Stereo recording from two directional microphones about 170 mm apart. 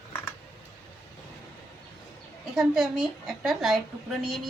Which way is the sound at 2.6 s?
5° right (ahead or behind).